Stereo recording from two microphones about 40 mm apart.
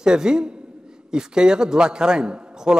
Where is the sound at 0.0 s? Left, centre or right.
Centre.